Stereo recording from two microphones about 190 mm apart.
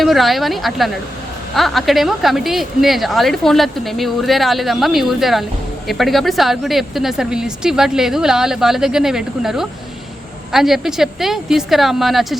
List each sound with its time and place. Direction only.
0.0 s speech: centre (ahead or behind)